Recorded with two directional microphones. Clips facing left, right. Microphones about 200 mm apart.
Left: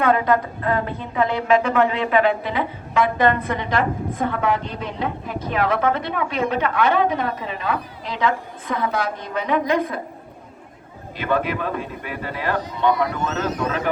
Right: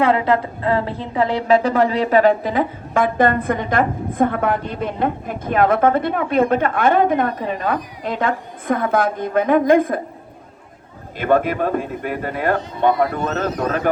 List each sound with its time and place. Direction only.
0.0 s a woman's voice: 25° right (ahead or behind); by 10.0 s 50° right (ahead or behind)
11.2 s a woman's voice: 50° right (ahead or behind)